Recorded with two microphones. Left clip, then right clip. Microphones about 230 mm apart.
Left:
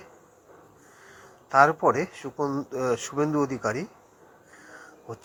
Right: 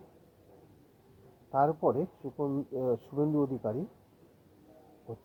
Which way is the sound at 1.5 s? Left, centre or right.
Left.